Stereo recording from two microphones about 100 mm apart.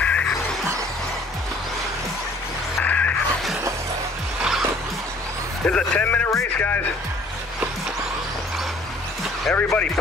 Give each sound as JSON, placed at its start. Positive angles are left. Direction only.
{"t": 0.0, "sound": "music", "side_deg": 15}
{"t": 2.8, "sound": "a sound", "side_deg": 15}
{"t": 4.4, "sound": "music", "side_deg": -5}
{"t": 5.7, "sound": "speech", "side_deg": 10}
{"t": 9.5, "sound": "speech", "side_deg": 10}